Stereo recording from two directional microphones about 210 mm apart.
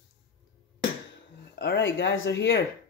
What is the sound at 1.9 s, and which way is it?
Speech, 60° left (ahead or behind).